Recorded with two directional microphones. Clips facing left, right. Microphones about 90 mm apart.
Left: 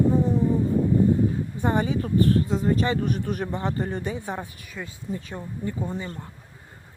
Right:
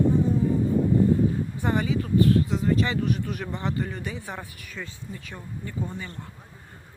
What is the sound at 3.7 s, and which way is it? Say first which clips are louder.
Speech: left 3 dB; 30° left (ahead or behind).